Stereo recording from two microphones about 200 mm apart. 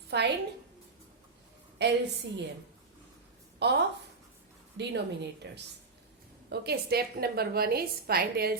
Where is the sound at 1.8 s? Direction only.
60° right (ahead or behind).